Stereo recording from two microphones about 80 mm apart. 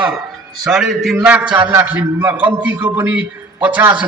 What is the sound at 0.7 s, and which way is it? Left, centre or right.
A man's voice, centre.